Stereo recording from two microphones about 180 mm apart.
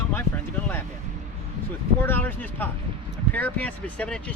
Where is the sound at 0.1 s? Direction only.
10° left (ahead or behind).